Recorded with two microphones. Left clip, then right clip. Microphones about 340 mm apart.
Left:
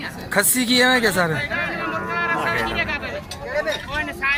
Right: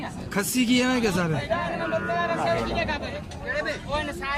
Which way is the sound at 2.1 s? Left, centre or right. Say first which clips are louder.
Left 6 dB; right.